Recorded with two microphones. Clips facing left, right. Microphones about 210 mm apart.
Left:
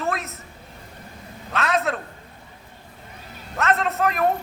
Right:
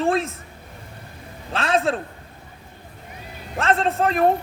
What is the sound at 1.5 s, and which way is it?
Speech, 30° right (ahead or behind).